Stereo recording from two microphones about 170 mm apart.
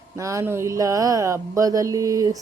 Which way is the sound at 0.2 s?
20° right (ahead or behind).